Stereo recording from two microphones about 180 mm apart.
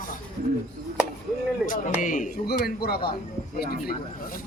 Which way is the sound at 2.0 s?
50° left (ahead or behind).